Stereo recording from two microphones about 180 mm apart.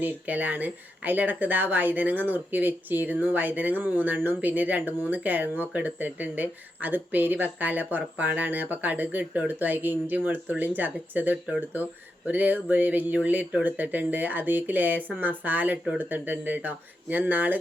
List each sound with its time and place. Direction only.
0.0 s speech: 10° right (ahead or behind)